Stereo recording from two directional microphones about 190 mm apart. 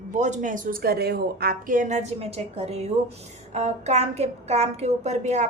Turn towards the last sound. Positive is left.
turn(degrees=-35)  # may be behind; listen again after turning